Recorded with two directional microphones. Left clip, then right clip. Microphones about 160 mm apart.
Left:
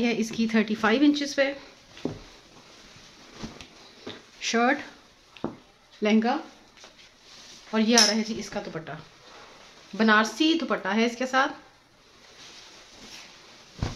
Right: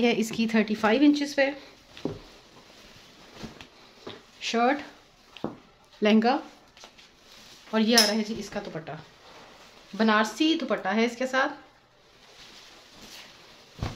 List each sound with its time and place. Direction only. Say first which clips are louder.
0.0 s speech: right 2 dB; 30° right (ahead or behind)
0.6 s speech: even; 5° right (ahead or behind)
4.4 s speech: left 1 dB; 5° left (ahead or behind)
5.4 s a sound: left 1 dB; 25° right (ahead or behind)
6.0 s speech: right 2 dB; 40° right (ahead or behind)
7.9 s a woman's voice: left 2 dB; 5° left (ahead or behind)
9.9 s speech: left 2 dB; 15° left (ahead or behind)